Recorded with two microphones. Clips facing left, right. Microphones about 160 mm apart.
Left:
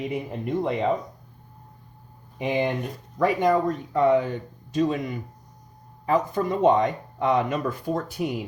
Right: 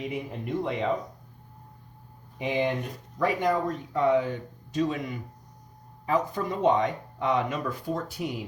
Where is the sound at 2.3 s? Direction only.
55° left (ahead or behind).